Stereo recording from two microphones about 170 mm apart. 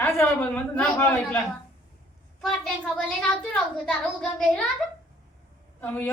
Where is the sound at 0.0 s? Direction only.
15° left (ahead or behind).